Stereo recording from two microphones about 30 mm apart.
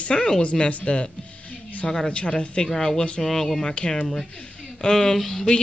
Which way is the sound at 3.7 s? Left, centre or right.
Left.